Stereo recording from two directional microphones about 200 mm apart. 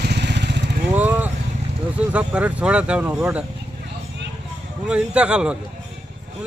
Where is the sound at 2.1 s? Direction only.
5° right (ahead or behind).